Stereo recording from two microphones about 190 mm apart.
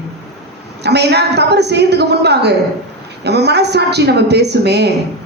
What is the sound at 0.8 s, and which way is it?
A woman's voice, 60° right (ahead or behind).